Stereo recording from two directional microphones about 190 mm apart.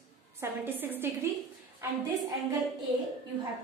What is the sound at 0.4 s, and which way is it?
Speech, 10° right (ahead or behind).